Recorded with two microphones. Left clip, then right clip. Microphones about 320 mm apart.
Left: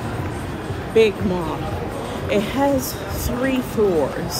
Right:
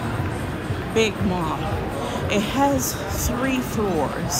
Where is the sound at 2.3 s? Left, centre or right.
Centre.